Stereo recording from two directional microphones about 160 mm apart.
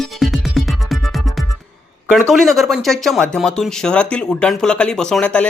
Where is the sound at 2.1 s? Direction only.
Centre (ahead or behind).